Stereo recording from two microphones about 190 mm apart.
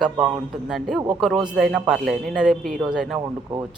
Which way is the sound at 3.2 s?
20° right (ahead or behind).